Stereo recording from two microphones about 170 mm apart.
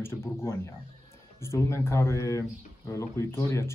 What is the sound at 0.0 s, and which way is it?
Speech, 15° left (ahead or behind).